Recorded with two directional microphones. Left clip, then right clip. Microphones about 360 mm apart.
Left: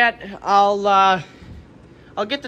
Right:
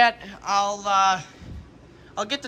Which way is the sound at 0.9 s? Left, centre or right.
Centre.